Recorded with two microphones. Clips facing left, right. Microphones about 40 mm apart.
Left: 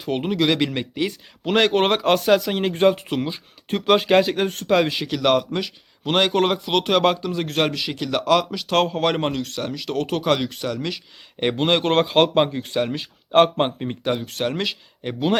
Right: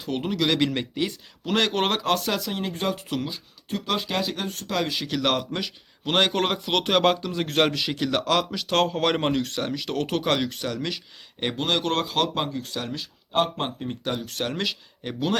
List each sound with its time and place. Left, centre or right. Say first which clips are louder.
0.0 s speech: left 4 dB; left
1.5 s speech: left 6 dB; left
1.8 s speech: left 5 dB; centre
2.0 s speech: left 7 dB; left
2.8 s speech: left 11 dB; left
3.7 s speech: left 10 dB; left
4.9 s a man's voice: left 5 dB; centre
11.5 s speech: left 6 dB; left
14.0 s speech: left 6 dB; centre